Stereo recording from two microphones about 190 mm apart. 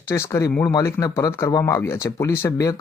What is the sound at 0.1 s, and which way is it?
Speech, 15° left (ahead or behind).